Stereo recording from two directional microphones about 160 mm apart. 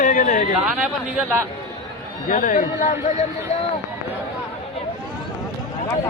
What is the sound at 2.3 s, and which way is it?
Speech, 55° left (ahead or behind).